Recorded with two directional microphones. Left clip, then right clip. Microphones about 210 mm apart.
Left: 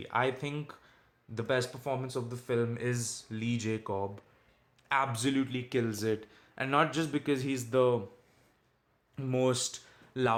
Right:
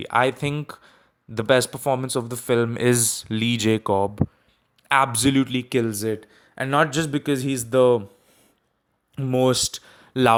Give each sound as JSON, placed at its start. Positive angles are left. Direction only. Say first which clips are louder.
{"t": 0.0, "sound": "speech", "louder": "right 11 dB", "side_deg": -35}
{"t": 9.1, "sound": "speech", "louder": "right 10 dB", "side_deg": -35}